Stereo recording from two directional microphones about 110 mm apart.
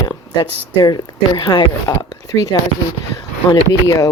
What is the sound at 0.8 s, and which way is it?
Speech, 40° left (ahead or behind).